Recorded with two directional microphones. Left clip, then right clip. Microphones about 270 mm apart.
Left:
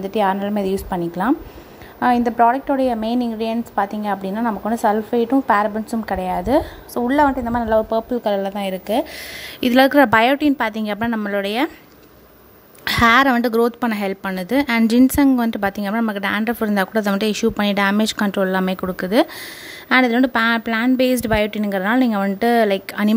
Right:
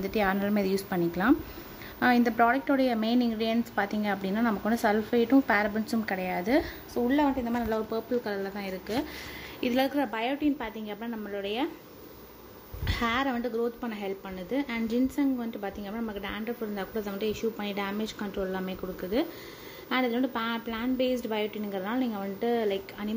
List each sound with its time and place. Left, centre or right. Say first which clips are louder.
0.0 s a woman's voice: left 9 dB; centre
8.2 s a woman's voice: left 13 dB; left
9.6 s speech: left 14 dB; left
12.8 s speech: left 16 dB; left